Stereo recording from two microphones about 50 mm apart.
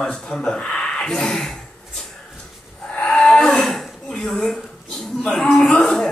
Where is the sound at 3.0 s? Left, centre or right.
Centre.